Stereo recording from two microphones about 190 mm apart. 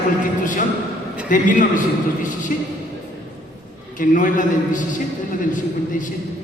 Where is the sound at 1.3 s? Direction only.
45° left (ahead or behind).